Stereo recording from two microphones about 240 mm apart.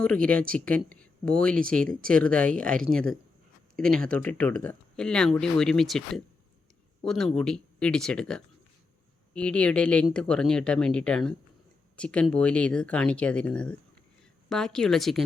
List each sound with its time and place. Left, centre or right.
0.0 s speech: centre